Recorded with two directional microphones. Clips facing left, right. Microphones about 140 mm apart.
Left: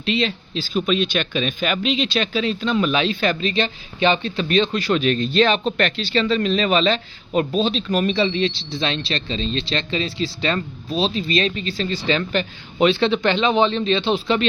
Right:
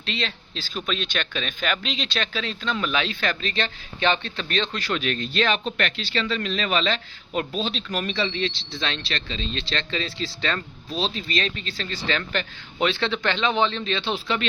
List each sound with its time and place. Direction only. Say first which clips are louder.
0.0 s speech: left 9 dB; 10° left (ahead or behind); by 9.6 s 30° left (ahead or behind)
9.6 s speech: left 5 dB; 15° left (ahead or behind)